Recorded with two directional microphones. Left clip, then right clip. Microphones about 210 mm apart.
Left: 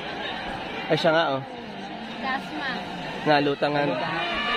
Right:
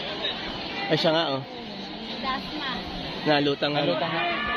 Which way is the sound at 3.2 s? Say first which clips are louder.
Left 2 dB; 5° left (ahead or behind).